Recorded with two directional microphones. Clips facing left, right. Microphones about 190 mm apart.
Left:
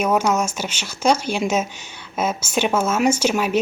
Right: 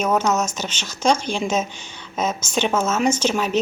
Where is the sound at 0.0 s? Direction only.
10° left (ahead or behind).